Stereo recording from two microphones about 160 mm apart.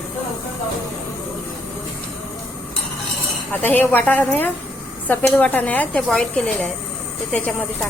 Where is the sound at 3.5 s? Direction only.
10° left (ahead or behind).